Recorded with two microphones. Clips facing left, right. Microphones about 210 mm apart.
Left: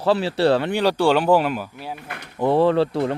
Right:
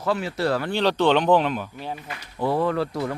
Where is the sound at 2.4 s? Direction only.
25° left (ahead or behind).